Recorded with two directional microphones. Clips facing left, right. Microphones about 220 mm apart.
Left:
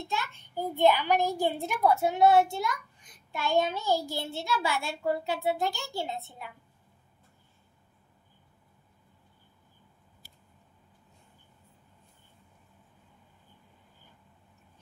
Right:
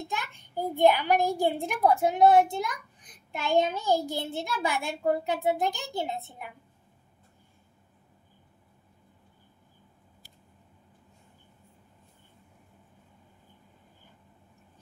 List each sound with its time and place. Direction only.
0.1 s a child's voice: 15° right (ahead or behind)